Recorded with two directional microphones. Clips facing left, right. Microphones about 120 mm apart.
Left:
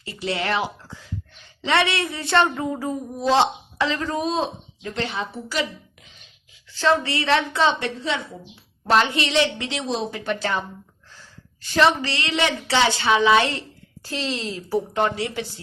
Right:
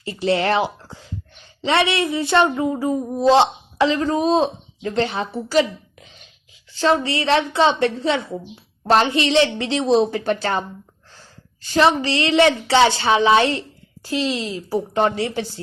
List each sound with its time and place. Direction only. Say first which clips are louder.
0.0 s a woman's voice: right 7 dB; 35° right (ahead or behind)
1.6 s a woman's voice: right 3 dB; 25° right (ahead or behind)
6.7 s a woman's voice: right 2 dB; 20° right (ahead or behind)
7.8 s a woman's voice: right 7 dB; 40° right (ahead or behind)
11.6 s a woman's voice: right 2 dB; 30° right (ahead or behind)
14.0 s a woman's voice: right 5 dB; 15° right (ahead or behind)
14.9 s a woman's voice: right 4 dB; 35° right (ahead or behind)